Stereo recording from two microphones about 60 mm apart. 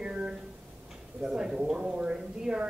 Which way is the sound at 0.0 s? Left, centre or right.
Centre.